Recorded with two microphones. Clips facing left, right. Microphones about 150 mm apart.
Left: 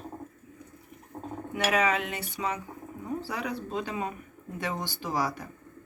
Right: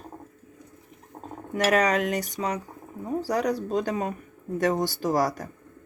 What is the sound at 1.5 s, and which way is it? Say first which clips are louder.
Speech: right 4 dB; 40° right (ahead or behind).